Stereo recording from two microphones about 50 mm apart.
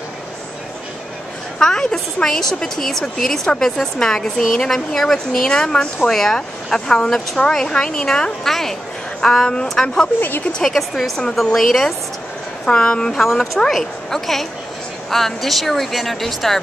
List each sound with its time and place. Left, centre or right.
1.6 s a woman's voice: centre
10.6 s speech: centre
12.6 s a woman's voice: centre
13.1 s speech: centre